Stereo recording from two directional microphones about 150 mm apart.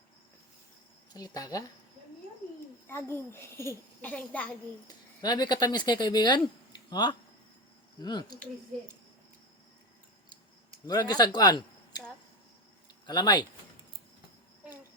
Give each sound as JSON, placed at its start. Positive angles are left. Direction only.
{"t": 1.1, "sound": "speech", "side_deg": 25}
{"t": 2.8, "sound": "a child's voice", "side_deg": 15}
{"t": 5.2, "sound": "speech", "side_deg": 30}
{"t": 10.8, "sound": "speech", "side_deg": 25}
{"t": 13.1, "sound": "speech", "side_deg": 30}